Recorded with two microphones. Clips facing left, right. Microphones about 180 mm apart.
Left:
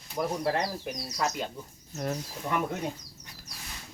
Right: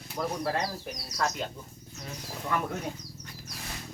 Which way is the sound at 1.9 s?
55° left (ahead or behind).